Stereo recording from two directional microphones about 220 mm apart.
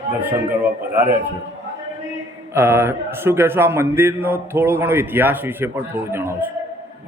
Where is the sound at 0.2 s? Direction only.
10° right (ahead or behind).